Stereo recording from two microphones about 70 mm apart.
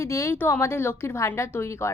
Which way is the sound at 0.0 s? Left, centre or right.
Left.